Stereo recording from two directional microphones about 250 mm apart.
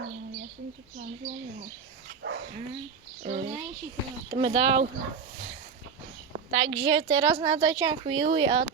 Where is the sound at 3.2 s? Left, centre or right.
Right.